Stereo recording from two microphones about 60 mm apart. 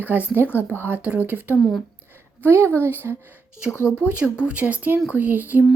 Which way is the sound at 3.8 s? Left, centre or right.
Centre.